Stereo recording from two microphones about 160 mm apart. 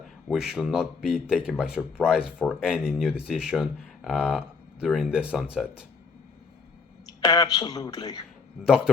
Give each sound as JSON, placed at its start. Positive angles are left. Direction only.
{"t": 0.3, "sound": "speech", "side_deg": -5}
{"t": 7.2, "sound": "speech", "side_deg": 25}